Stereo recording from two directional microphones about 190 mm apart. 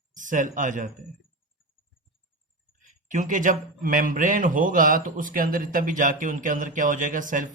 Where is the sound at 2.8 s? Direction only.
45° right (ahead or behind).